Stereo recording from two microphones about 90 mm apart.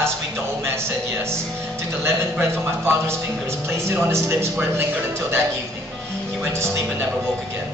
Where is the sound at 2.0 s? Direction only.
25° right (ahead or behind).